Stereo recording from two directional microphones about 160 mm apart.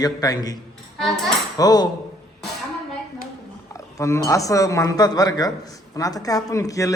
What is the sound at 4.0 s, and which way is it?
Speech, 20° left (ahead or behind).